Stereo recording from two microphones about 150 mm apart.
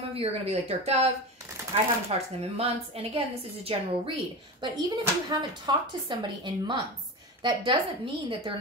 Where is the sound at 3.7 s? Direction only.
40° right (ahead or behind).